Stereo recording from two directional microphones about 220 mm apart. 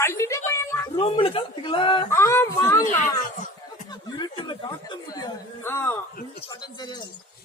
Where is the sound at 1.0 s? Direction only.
25° left (ahead or behind).